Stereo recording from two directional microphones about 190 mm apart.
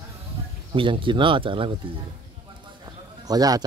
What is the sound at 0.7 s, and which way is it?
Speech, 25° right (ahead or behind).